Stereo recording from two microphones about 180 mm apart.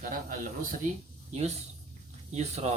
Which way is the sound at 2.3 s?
35° right (ahead or behind).